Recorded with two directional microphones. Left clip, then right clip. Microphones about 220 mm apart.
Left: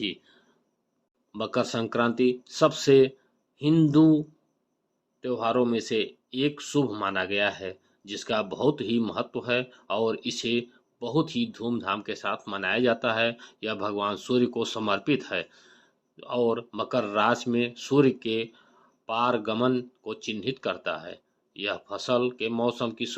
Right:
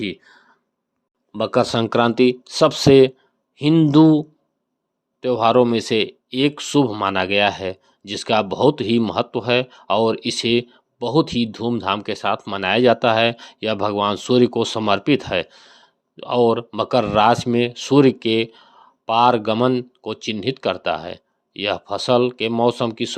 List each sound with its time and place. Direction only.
1.3 s speech: 25° right (ahead or behind)
5.2 s speech: 40° right (ahead or behind)